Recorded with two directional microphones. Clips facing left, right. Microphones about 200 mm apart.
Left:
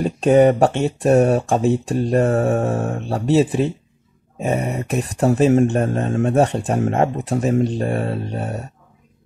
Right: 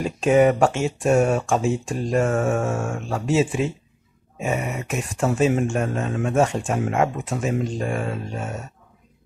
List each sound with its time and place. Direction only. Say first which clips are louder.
0.0 s speech: left 4 dB; 40° left (ahead or behind)